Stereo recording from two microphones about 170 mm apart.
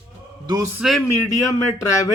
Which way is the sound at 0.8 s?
Centre (ahead or behind).